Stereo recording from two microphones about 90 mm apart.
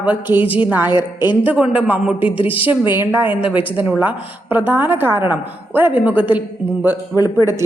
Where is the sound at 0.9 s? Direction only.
55° left (ahead or behind).